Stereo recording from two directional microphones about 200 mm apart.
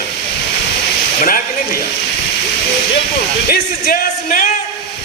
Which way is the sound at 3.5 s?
45° left (ahead or behind).